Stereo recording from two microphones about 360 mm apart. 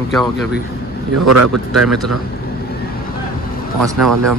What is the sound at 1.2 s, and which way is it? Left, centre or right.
Speech, right.